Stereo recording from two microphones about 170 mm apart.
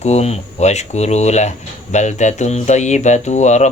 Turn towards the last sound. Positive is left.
turn(degrees=45)  # may be behind; listen again after turning